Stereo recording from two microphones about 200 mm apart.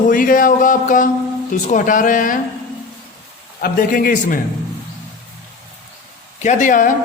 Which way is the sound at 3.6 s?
45° left (ahead or behind).